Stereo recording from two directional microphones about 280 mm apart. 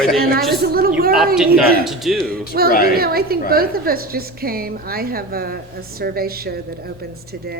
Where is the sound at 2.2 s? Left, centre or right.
Right.